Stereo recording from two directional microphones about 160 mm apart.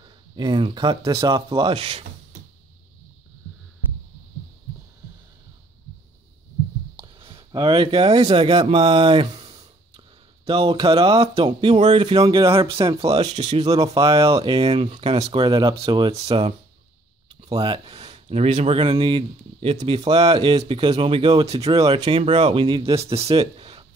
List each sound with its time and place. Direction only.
0.0 s speech: 25° right (ahead or behind)
7.0 s speech: 35° right (ahead or behind)
23.3 s a sound: 35° right (ahead or behind)